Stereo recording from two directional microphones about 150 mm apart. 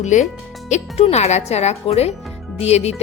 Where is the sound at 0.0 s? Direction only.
55° left (ahead or behind).